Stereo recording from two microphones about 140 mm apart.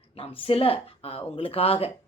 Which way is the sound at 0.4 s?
40° left (ahead or behind).